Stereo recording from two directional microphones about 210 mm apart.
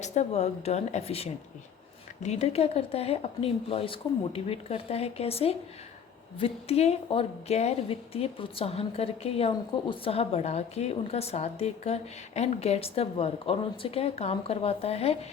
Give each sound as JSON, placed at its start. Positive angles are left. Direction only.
{"t": 0.0, "sound": "a woman's voice", "side_deg": 35}